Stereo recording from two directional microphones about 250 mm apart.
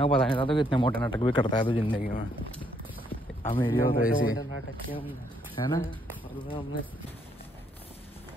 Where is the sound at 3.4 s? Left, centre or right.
Centre.